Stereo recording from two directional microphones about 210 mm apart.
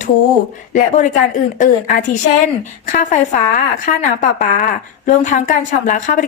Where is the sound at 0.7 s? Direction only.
35° left (ahead or behind).